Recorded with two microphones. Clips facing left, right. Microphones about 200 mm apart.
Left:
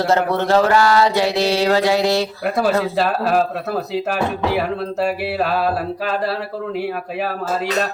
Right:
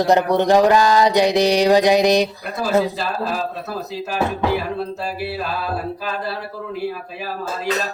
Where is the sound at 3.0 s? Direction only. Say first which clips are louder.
Left 6 dB; 60° left (ahead or behind).